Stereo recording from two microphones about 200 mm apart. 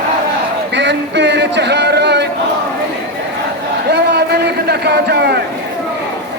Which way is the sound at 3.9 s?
55° right (ahead or behind).